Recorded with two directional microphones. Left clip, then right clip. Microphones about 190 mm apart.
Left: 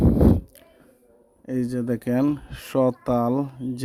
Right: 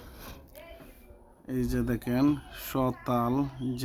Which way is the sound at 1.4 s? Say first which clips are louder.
Left 5 dB; 30° left (ahead or behind).